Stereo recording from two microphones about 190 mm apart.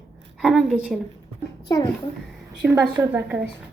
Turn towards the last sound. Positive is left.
turn(degrees=-5)  # may be behind; listen again after turning